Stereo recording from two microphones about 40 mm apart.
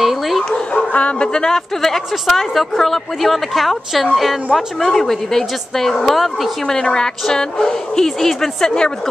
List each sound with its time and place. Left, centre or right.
0.0 s bow-wow: centre
0.7 s speech: left
1.3 s a woman's voice: centre
1.8 s speech: centre
4.9 s a woman's voice: centre
6.8 s a woman's voice: centre